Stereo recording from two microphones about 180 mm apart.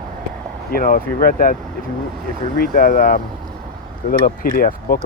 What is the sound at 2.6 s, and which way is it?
Speech, 50° left (ahead or behind).